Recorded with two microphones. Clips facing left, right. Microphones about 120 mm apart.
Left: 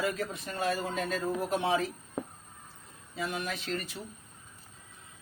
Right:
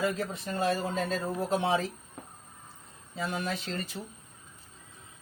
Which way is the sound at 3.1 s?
30° right (ahead or behind).